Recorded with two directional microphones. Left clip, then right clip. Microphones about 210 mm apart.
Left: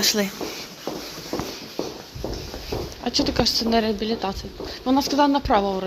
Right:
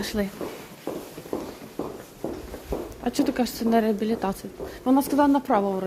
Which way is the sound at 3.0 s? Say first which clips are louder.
Left 4 dB; 20° right (ahead or behind).